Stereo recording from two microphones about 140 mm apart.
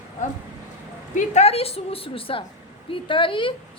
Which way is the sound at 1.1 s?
55° left (ahead or behind).